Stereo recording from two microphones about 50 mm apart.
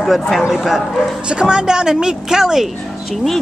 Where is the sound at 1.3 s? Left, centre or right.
Centre.